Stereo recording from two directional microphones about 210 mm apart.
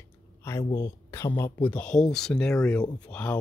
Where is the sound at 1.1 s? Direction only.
10° left (ahead or behind).